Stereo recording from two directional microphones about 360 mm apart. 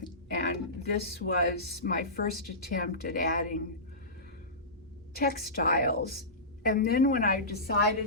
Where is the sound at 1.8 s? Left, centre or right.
Left.